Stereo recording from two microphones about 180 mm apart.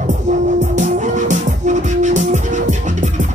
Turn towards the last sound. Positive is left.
turn(degrees=-45)  # may be behind; listen again after turning